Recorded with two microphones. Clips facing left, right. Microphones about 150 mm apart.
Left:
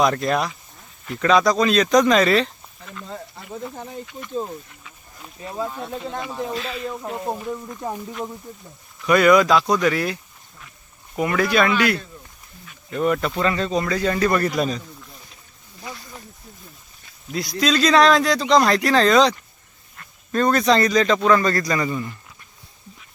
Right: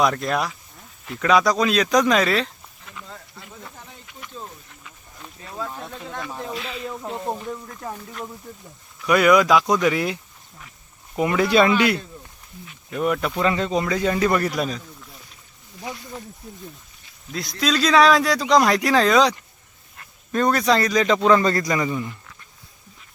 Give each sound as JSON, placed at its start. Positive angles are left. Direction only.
{"t": 0.0, "sound": "speech", "side_deg": 0}
{"t": 5.4, "sound": "speech", "side_deg": 20}
{"t": 9.0, "sound": "speech", "side_deg": -10}
{"t": 11.2, "sound": "speech", "side_deg": -20}
{"t": 12.6, "sound": "speech", "side_deg": -5}
{"t": 13.4, "sound": "speech", "side_deg": -15}
{"t": 14.5, "sound": "speech", "side_deg": 0}
{"t": 17.3, "sound": "speech", "side_deg": 0}
{"t": 21.2, "sound": "speech", "side_deg": -20}